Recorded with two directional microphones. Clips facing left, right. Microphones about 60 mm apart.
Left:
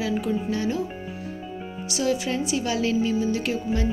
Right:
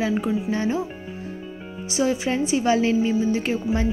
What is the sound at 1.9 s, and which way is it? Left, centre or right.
A woman's voice, right.